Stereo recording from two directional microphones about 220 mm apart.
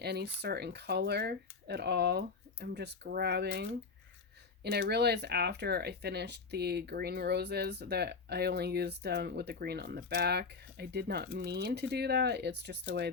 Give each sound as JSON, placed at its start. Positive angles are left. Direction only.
{"t": 0.0, "sound": "speech", "side_deg": -45}